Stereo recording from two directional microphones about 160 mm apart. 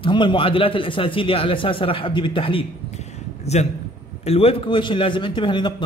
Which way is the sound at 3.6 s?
45° left (ahead or behind).